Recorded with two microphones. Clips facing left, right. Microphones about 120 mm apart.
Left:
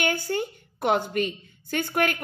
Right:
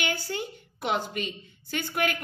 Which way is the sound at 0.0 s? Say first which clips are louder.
Left 5 dB; 50° left (ahead or behind).